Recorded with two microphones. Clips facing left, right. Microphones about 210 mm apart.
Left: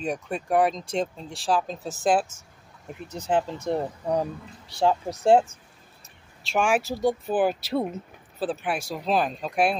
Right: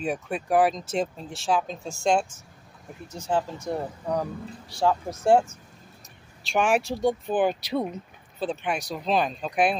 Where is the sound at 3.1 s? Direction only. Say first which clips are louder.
Left 2 dB; 20° left (ahead or behind).